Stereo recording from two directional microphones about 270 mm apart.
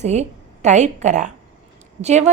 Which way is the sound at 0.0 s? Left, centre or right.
Right.